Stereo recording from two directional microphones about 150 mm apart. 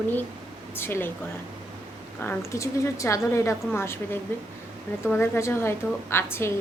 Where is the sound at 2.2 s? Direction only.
15° left (ahead or behind).